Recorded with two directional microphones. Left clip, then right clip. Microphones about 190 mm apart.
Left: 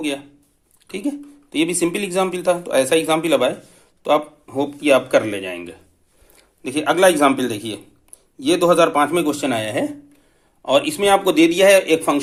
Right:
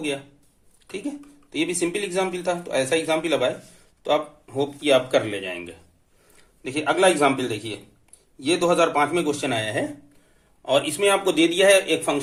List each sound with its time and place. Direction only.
0.9 s a man's voice: 40° left (ahead or behind)